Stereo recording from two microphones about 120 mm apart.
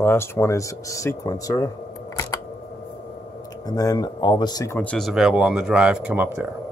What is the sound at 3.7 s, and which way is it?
Speech, 30° left (ahead or behind).